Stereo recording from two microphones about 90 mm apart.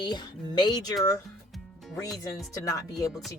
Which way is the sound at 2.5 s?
35° left (ahead or behind).